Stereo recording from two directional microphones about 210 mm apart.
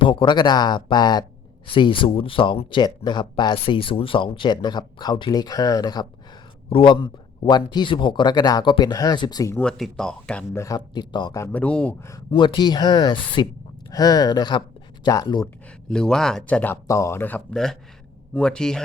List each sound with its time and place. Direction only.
0.0 s speech: 25° left (ahead or behind)
12.3 s speech: 20° left (ahead or behind)
15.9 s speech: 5° left (ahead or behind)